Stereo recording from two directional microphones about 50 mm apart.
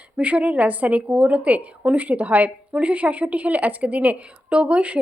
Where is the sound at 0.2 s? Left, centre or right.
Right.